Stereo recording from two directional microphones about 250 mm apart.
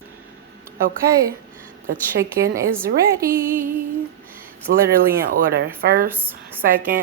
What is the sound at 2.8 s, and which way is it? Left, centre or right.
Speech, right.